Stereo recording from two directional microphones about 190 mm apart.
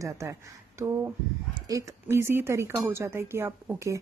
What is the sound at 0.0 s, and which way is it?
Speech, 15° right (ahead or behind).